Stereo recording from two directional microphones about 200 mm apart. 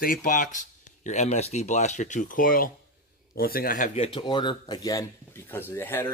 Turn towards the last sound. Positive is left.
turn(degrees=10)  # may be behind; listen again after turning